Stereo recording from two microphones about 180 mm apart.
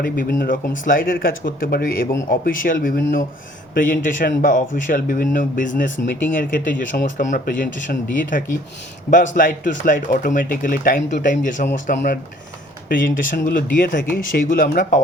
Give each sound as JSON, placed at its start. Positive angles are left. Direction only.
{"t": 0.0, "sound": "speech", "side_deg": 55}
{"t": 12.9, "sound": "speech", "side_deg": 50}